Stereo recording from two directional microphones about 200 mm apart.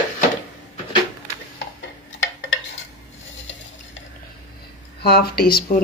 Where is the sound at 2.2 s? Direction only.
65° left (ahead or behind).